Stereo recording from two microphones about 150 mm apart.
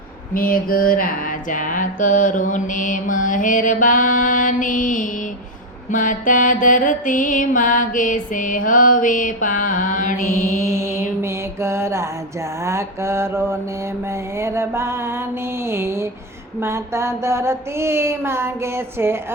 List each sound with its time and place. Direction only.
0.3 s mantra: 70° left (ahead or behind)
10.2 s mantra: 20° left (ahead or behind)
10.7 s mantra: 20° right (ahead or behind)
12.6 s a sound: 20° right (ahead or behind)